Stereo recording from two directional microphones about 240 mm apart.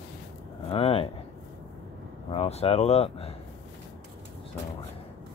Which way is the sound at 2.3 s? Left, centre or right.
Left.